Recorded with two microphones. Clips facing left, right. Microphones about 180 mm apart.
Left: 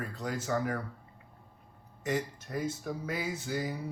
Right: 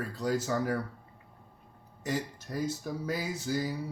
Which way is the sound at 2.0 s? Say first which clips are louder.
Left 1 dB; 35° right (ahead or behind).